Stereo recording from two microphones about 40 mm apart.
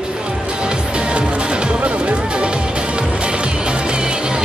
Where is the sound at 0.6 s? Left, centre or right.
Right.